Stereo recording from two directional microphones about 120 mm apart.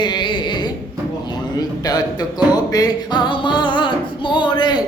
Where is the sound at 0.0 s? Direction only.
40° left (ahead or behind).